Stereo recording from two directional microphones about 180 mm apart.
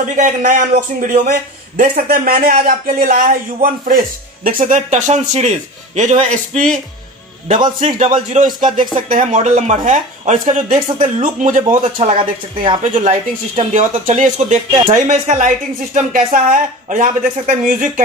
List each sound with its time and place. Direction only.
0.1 s speech: 45° right (ahead or behind)
7.8 s speech: 40° right (ahead or behind)